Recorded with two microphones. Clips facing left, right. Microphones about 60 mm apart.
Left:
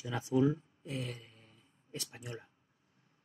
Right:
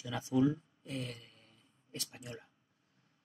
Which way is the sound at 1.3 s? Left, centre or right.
Left.